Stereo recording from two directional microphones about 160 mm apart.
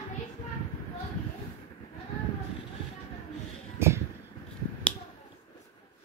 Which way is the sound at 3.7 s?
15° right (ahead or behind).